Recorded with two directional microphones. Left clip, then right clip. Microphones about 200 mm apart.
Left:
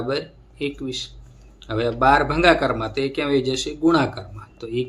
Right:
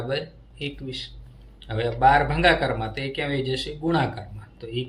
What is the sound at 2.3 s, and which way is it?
Speech, 35° left (ahead or behind).